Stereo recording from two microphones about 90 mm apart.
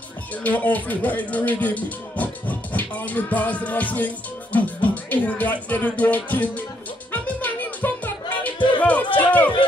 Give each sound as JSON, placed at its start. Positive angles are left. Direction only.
{"t": 0.3, "sound": "speech", "side_deg": 20}
{"t": 7.1, "sound": "music", "side_deg": 20}
{"t": 9.1, "sound": "a sound", "side_deg": 20}